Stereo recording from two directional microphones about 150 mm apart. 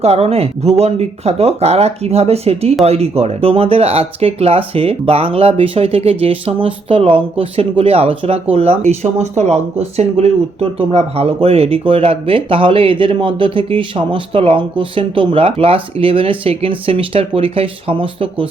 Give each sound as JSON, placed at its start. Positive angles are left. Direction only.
{"t": 0.0, "sound": "speech", "side_deg": -40}